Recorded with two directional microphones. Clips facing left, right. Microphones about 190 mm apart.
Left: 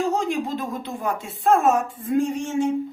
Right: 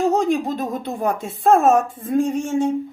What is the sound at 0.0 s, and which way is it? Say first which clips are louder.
Speech: right 5 dB; 40° right (ahead or behind).